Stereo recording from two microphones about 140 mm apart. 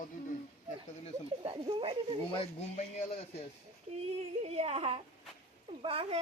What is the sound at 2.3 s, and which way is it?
Speech, 40° left (ahead or behind).